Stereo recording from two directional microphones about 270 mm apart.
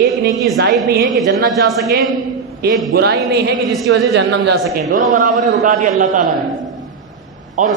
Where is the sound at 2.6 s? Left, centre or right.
Right.